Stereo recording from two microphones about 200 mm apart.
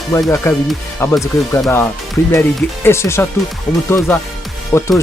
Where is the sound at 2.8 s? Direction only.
10° left (ahead or behind).